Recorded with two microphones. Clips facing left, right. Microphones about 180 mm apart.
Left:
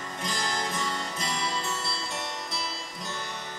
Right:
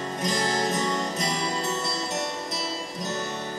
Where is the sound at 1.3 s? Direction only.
20° right (ahead or behind).